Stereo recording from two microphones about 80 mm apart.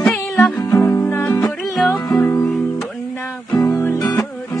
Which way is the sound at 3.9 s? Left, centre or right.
Left.